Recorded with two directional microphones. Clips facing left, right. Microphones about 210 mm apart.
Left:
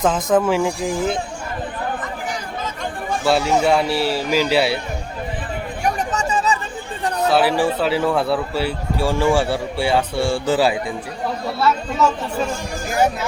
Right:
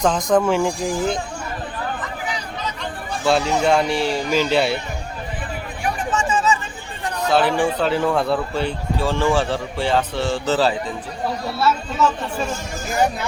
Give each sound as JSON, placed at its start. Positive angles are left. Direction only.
{"t": 0.0, "sound": "speech", "side_deg": 5}
{"t": 3.2, "sound": "speech", "side_deg": 5}
{"t": 5.8, "sound": "chatter", "side_deg": 40}
{"t": 7.3, "sound": "speech", "side_deg": 5}